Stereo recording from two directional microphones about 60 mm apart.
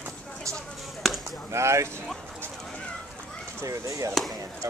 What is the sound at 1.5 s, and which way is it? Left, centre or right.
Speech, right.